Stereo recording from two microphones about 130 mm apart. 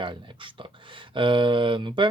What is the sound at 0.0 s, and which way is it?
Speech, 40° right (ahead or behind).